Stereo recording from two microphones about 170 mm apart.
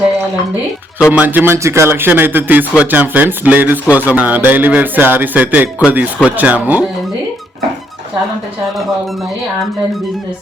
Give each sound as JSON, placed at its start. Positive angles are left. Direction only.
{"t": 1.1, "sound": "speech", "side_deg": -10}